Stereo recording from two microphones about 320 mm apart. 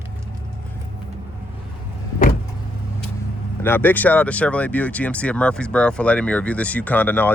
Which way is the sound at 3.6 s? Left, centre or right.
Centre.